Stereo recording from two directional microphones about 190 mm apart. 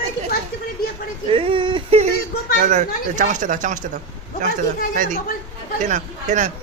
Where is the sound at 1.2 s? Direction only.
30° right (ahead or behind).